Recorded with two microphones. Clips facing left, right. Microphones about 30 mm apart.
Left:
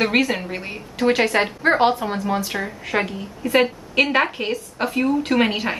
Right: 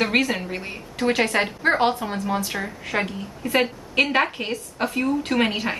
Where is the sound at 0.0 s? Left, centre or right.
Centre.